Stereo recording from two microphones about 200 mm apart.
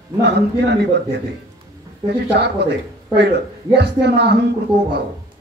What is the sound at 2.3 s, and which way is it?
Speech, 55° right (ahead or behind).